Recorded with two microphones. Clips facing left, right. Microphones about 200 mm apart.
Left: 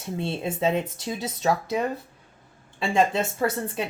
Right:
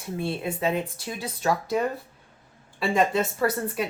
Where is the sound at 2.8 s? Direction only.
25° left (ahead or behind).